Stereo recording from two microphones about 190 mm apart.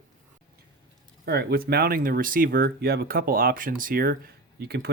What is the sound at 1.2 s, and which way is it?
Speech, 55° right (ahead or behind).